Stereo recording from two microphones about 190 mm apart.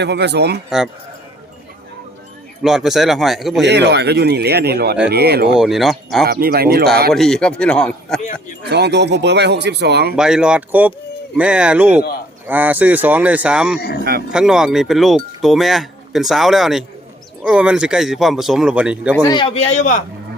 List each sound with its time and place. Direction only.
0.0 s speech: 65° right (ahead or behind)
2.6 s speech: centre (ahead or behind)
3.6 s speech: 65° right (ahead or behind)
5.5 s speech: centre (ahead or behind)
6.2 s speech: 55° right (ahead or behind)
7.1 s speech: centre (ahead or behind)
8.2 s speech: 40° left (ahead or behind)
8.6 s speech: 60° right (ahead or behind)
10.2 s speech: 5° right (ahead or behind)
13.7 s speech: 55° left (ahead or behind)
14.3 s speech: 5° right (ahead or behind)
19.1 s speech: 15° left (ahead or behind)
19.4 s speech: 30° left (ahead or behind)